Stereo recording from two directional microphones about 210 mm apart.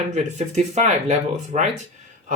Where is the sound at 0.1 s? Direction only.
35° right (ahead or behind).